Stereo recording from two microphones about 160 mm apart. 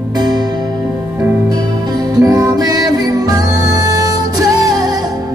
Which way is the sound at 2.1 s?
20° right (ahead or behind).